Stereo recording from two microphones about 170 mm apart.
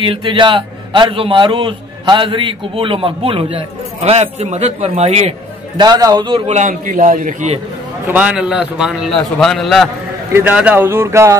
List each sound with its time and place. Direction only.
0.0 s a man's voice: 30° right (ahead or behind)
5.8 s a man's voice: 20° right (ahead or behind)
6.5 s a man's voice: 50° right (ahead or behind)
8.1 s a man's voice: 10° right (ahead or behind)